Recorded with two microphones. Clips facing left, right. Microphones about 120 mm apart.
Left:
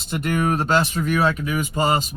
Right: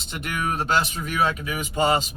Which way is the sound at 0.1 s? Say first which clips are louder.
Left 6 dB; 40° left (ahead or behind).